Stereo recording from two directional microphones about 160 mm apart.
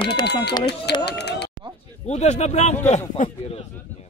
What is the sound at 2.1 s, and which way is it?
Speech, 45° left (ahead or behind).